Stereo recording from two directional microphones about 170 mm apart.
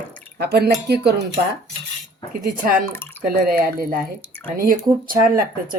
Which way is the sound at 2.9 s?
10° left (ahead or behind).